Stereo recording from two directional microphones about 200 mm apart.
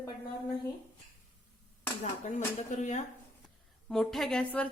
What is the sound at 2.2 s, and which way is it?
Speech, 35° left (ahead or behind).